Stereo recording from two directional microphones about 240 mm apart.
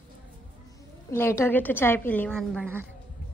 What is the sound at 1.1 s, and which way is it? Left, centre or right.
A woman's voice, centre.